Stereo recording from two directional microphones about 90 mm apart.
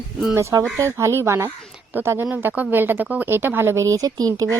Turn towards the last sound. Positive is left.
turn(degrees=-40)  # may be behind; listen again after turning